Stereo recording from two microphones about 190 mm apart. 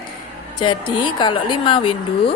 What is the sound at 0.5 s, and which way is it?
A woman's voice, 25° left (ahead or behind).